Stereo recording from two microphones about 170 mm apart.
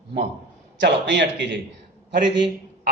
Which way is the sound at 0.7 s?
90° right.